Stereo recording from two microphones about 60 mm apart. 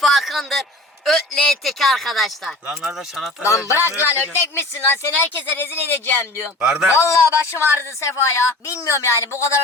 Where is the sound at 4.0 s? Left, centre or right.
Left.